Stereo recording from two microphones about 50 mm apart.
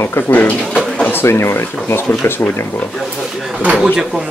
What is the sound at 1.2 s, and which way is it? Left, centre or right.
Speech, left.